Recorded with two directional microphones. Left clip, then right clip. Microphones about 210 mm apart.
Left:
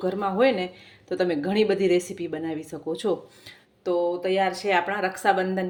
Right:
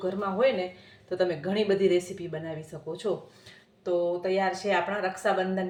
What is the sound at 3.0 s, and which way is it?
Speech, 45° left (ahead or behind).